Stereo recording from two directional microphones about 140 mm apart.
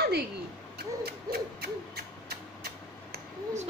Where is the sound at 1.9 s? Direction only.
90° right.